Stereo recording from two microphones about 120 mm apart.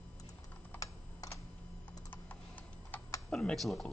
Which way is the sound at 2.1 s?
15° left (ahead or behind).